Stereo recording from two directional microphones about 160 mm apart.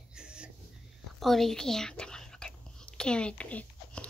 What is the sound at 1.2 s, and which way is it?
Whispering, centre (ahead or behind).